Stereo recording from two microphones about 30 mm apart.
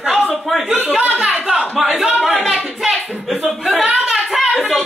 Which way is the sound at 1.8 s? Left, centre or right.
Centre.